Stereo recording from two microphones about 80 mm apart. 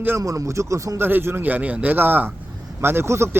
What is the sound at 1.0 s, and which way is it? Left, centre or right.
A man's voice, right.